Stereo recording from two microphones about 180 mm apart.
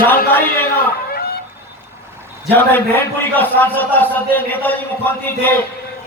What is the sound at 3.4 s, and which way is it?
A man's voice, 10° left (ahead or behind).